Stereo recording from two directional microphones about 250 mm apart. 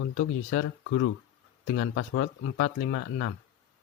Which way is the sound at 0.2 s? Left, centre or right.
Left.